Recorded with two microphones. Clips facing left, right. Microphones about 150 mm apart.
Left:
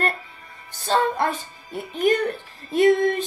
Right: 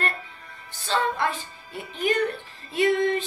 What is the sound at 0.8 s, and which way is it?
Speech, 45° left (ahead or behind).